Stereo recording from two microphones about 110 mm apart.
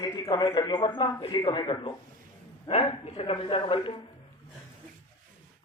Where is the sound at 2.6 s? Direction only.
65° left (ahead or behind).